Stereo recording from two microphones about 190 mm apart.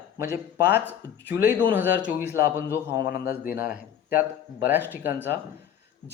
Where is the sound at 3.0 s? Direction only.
50° left (ahead or behind).